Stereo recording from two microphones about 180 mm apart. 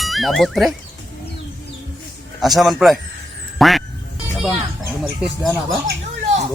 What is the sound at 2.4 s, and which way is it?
Speech, centre (ahead or behind).